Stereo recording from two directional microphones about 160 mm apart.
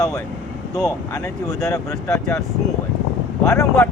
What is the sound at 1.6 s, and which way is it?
Speech, 20° left (ahead or behind).